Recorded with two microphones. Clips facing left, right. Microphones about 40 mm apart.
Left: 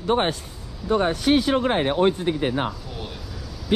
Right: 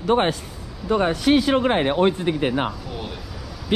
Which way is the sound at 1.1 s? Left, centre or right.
Right.